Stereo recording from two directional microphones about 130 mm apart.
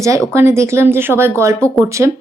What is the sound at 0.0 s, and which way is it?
A woman's voice, 25° right (ahead or behind).